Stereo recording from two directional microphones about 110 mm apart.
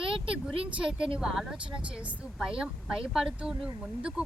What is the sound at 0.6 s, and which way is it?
Speech, 5° right (ahead or behind).